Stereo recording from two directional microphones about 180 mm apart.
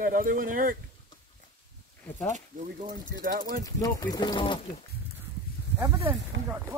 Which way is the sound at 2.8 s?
50° right (ahead or behind).